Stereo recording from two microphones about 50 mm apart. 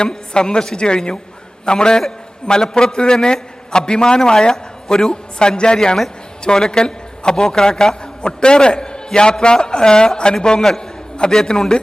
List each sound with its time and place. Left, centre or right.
0.0 s a woman's voice: centre